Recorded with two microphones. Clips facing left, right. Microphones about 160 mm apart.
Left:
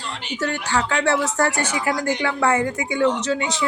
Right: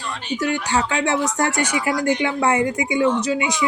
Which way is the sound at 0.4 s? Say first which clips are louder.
Right 1 dB; 20° right (ahead or behind).